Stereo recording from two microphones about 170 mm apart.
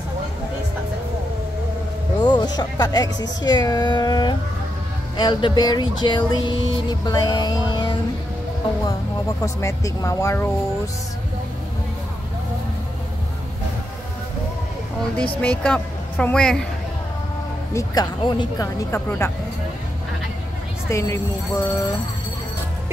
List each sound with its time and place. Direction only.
2.1 s speech: 25° left (ahead or behind)
9.4 s speech: 20° left (ahead or behind)
15.4 s a woman's voice: 5° left (ahead or behind)
17.7 s speech: 25° left (ahead or behind)
20.9 s speech: 15° left (ahead or behind)